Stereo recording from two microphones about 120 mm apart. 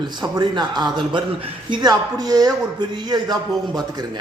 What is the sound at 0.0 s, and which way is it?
A man's voice, 35° right (ahead or behind).